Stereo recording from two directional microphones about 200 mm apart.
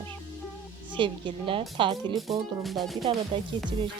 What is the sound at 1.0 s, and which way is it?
Speech, 25° right (ahead or behind).